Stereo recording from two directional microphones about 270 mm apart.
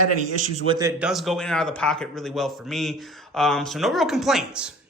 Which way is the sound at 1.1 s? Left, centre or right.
Centre.